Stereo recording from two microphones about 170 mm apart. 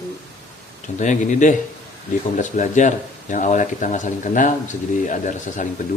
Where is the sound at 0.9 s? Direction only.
45° left (ahead or behind).